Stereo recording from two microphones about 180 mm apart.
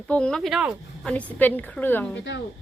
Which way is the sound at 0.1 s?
5° left (ahead or behind).